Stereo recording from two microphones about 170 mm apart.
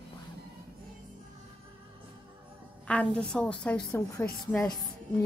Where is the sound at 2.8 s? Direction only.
5° left (ahead or behind).